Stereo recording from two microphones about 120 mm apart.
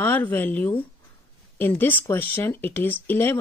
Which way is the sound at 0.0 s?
15° left (ahead or behind).